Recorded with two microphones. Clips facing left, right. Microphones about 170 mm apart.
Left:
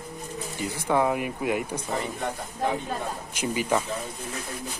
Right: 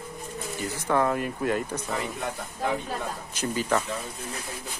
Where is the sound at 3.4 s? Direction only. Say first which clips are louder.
Left 1 dB; 15° left (ahead or behind).